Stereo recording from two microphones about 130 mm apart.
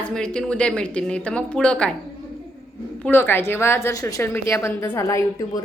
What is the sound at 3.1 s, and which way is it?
A woman's voice, 15° left (ahead or behind).